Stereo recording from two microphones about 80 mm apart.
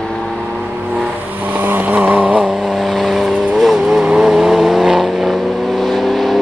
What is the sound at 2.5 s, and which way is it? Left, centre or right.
Vehicle, centre.